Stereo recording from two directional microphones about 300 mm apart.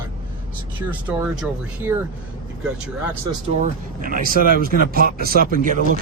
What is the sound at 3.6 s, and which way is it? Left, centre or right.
Speech, right.